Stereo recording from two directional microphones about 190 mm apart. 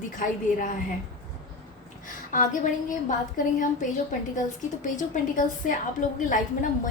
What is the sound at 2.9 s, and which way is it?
Speech, 45° left (ahead or behind).